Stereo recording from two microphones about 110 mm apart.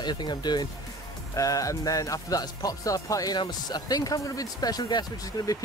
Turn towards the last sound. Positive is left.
turn(degrees=35)  # may be behind; listen again after turning